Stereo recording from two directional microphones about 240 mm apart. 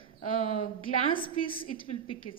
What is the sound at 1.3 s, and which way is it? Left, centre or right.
A woman's voice, left.